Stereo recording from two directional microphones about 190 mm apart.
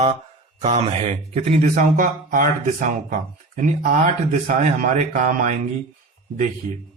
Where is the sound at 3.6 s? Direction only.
45° right (ahead or behind).